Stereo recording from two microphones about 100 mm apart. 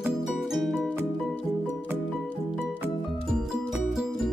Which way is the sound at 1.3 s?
15° left (ahead or behind).